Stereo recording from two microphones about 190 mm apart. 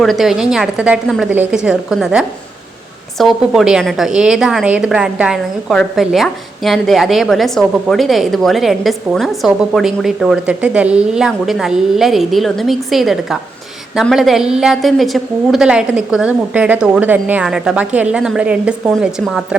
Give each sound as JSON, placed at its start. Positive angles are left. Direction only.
{"t": 0.0, "sound": "a woman's voice", "side_deg": 0}